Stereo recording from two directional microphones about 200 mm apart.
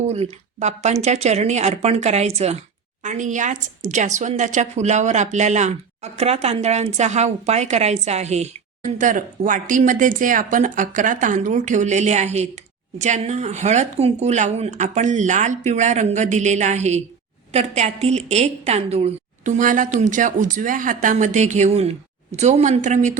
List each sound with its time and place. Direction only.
0.0 s a woman's voice: 35° right (ahead or behind)